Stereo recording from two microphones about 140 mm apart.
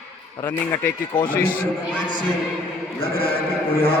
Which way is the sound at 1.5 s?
10° right (ahead or behind).